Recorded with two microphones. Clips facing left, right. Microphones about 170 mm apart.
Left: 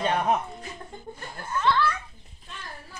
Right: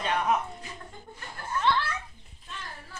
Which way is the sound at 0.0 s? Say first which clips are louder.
Left 3 dB; 35° left (ahead or behind).